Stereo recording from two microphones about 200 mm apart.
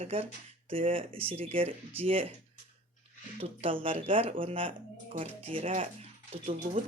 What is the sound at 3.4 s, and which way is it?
Speech, 30° right (ahead or behind).